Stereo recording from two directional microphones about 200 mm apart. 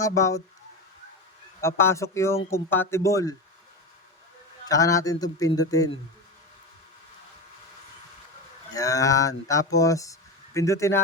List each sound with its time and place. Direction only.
0.0 s speech: 15° left (ahead or behind)
1.6 s speech: 15° left (ahead or behind)
4.6 s speech: 15° left (ahead or behind)
8.7 s speech: 15° left (ahead or behind)